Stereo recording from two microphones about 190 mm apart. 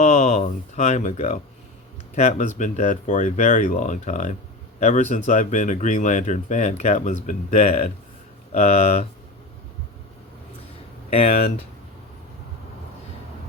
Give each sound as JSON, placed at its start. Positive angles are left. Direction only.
{"t": 0.0, "sound": "speech", "side_deg": 35}
{"t": 11.1, "sound": "speech", "side_deg": 30}